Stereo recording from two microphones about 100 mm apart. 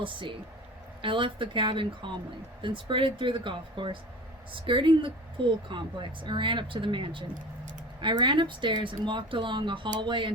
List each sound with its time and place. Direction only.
0.0 s a woman's voice: 55° right (ahead or behind)